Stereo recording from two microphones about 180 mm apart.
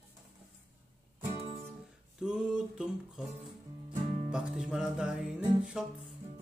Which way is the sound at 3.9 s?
45° right (ahead or behind).